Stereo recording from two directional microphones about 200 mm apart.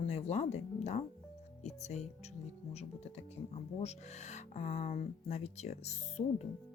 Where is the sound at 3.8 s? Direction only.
35° left (ahead or behind).